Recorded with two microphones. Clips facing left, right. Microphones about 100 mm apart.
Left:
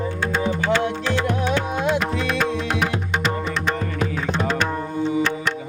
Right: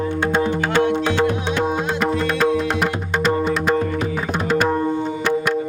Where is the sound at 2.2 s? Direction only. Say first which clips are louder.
Right 4 dB; centre (ahead or behind).